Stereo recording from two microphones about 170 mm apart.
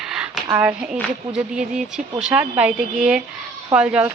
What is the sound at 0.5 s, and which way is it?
Speech, 10° right (ahead or behind).